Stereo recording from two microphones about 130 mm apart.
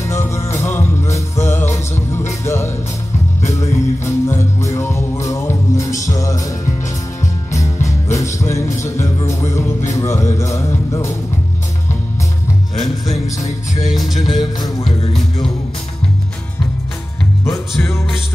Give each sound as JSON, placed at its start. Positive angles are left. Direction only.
{"t": 0.1, "sound": "music", "side_deg": 20}
{"t": 13.8, "sound": "music", "side_deg": 0}
{"t": 14.4, "sound": "music", "side_deg": 30}
{"t": 17.5, "sound": "music", "side_deg": 20}